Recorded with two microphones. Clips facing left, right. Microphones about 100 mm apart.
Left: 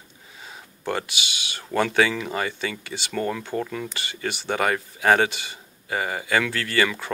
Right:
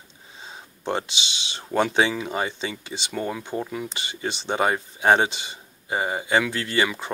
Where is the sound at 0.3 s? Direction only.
25° right (ahead or behind).